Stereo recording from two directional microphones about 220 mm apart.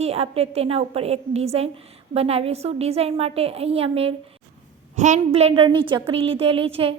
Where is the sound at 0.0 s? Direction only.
30° right (ahead or behind).